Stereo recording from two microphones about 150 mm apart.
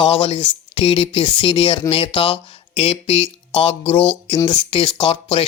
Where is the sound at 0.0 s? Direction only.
35° left (ahead or behind).